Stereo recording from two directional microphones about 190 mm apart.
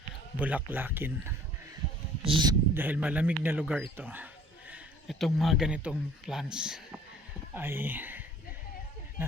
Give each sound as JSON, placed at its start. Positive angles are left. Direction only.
{"t": 0.3, "sound": "a man's voice", "side_deg": -10}
{"t": 2.2, "sound": "speech", "side_deg": -25}
{"t": 2.7, "sound": "a man's voice", "side_deg": -10}